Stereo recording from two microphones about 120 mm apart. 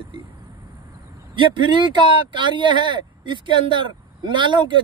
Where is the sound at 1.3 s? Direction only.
40° right (ahead or behind).